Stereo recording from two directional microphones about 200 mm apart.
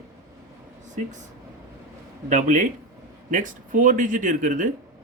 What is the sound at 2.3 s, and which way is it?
Speech, 40° right (ahead or behind).